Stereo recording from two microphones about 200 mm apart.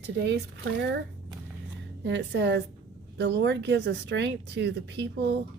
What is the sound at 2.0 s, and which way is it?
A woman's voice, 60° right (ahead or behind).